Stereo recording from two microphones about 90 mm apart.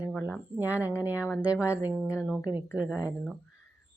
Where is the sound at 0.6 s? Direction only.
20° right (ahead or behind).